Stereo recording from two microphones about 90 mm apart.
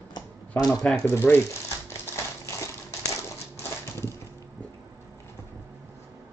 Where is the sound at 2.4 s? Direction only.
35° left (ahead or behind).